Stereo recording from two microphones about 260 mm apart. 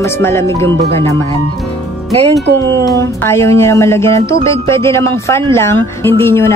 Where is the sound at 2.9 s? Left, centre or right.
Centre.